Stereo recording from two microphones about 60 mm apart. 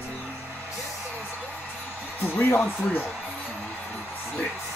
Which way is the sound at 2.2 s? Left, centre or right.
Left.